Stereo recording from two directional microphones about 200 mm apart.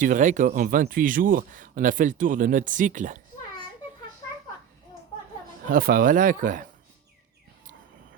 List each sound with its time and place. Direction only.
0.0 s speech: 40° right (ahead or behind)
5.6 s speech: 45° right (ahead or behind)